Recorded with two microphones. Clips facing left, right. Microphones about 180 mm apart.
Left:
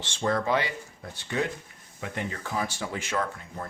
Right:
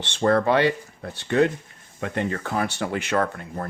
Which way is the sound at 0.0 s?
65° right (ahead or behind).